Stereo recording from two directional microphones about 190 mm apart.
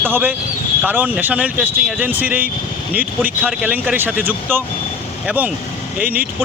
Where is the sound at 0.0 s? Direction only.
10° right (ahead or behind).